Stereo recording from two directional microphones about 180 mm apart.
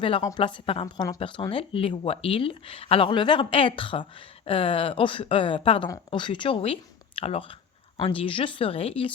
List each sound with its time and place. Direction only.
0.2 s speech: 20° left (ahead or behind)